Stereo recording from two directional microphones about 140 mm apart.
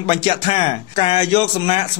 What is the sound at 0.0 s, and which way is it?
A man's voice, 40° left (ahead or behind).